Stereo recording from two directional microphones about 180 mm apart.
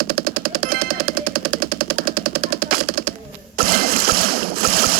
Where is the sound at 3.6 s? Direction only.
55° right (ahead or behind).